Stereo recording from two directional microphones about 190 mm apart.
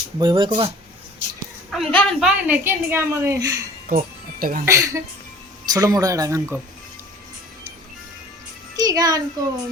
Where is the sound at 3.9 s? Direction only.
50° right (ahead or behind).